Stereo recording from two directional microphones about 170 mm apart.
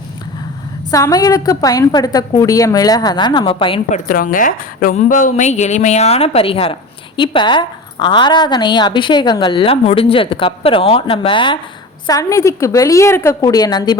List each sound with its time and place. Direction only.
0.9 s a woman's voice: 20° left (ahead or behind)
3.8 s a woman's voice: 50° left (ahead or behind); by 11.6 s 30° left (ahead or behind)
12.0 s a woman's voice: 20° left (ahead or behind)